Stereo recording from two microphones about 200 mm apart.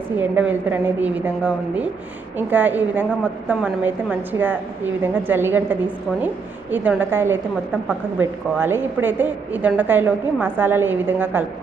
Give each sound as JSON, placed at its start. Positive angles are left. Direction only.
{"t": 0.2, "sound": "a woman's voice", "side_deg": -10}